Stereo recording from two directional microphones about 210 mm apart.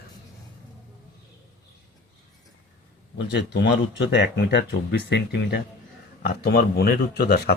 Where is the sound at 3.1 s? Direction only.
55° left (ahead or behind).